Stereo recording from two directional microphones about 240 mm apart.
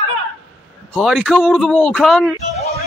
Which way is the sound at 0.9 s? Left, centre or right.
Centre.